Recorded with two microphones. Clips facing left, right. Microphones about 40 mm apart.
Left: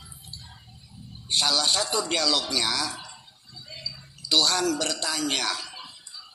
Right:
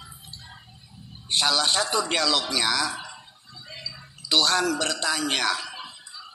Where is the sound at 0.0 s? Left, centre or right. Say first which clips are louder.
Right 2 dB; right.